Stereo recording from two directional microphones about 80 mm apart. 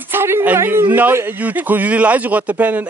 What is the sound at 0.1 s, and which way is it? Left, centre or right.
A woman's voice, right.